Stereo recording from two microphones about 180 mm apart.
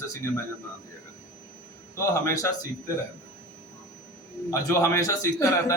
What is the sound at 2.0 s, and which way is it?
Speech, 15° left (ahead or behind).